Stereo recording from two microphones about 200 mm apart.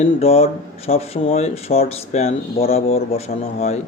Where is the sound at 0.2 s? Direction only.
30° left (ahead or behind).